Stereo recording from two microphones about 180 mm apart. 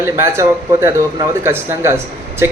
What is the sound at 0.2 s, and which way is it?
Speech, 15° right (ahead or behind).